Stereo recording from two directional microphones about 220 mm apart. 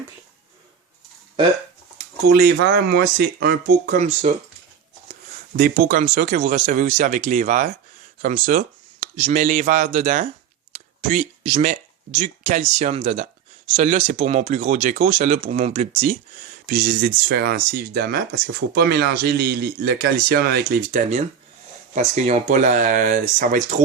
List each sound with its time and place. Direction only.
2.3 s speech: 40° right (ahead or behind)
5.5 s speech: 40° right (ahead or behind)